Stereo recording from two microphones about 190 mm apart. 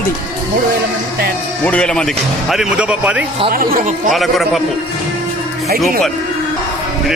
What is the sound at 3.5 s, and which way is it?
Speech, 50° right (ahead or behind).